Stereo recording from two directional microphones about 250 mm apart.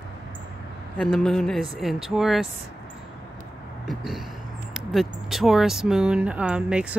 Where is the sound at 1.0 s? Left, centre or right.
Centre.